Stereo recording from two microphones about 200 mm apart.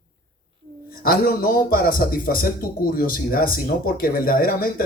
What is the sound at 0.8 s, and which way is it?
Speech, 45° left (ahead or behind).